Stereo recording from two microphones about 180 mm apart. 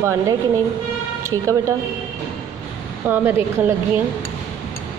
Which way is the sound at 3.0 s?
10° right (ahead or behind).